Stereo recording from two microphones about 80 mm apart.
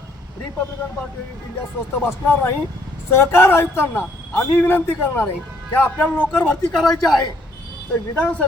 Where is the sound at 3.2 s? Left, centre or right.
Left; by 6.8 s centre.